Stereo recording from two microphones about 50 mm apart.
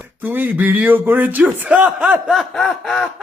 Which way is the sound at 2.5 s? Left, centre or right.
Centre.